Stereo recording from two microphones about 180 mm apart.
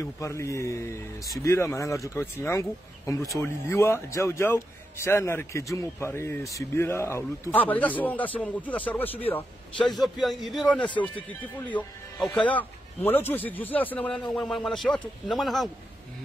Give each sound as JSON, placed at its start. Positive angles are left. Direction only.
{"t": 0.0, "sound": "speech", "side_deg": 15}
{"t": 9.9, "sound": "a man's voice", "side_deg": 0}